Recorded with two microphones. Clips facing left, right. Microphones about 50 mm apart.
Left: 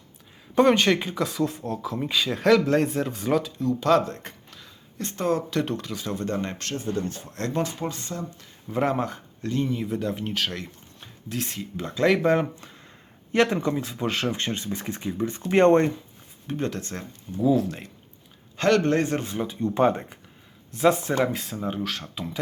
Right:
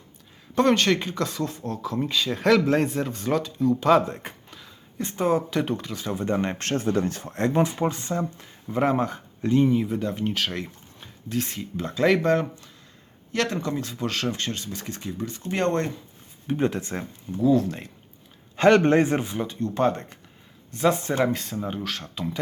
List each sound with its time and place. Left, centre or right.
0.5 s speech: centre
6.1 s speech: centre
6.7 s speech: right
7.3 s speech: centre
8.6 s speech: centre
9.4 s speech: centre; by 15.9 s left
16.5 s speech: centre
17.4 s speech: centre
18.5 s a sound: centre
18.8 s speech: right
19.2 s speech: centre
19.5 s speech: centre